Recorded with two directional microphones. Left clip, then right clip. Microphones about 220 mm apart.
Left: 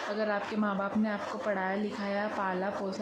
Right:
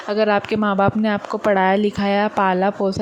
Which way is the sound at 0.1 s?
35° right (ahead or behind).